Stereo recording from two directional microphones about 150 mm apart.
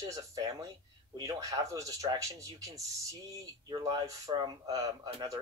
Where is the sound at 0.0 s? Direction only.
20° right (ahead or behind).